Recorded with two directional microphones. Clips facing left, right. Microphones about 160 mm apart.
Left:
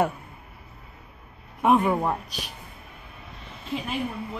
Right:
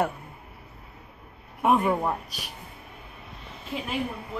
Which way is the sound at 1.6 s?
5° right (ahead or behind).